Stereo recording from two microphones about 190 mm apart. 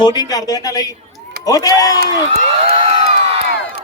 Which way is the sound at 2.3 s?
30° right (ahead or behind).